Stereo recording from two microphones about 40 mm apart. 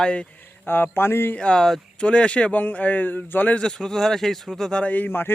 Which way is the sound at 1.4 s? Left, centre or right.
Left.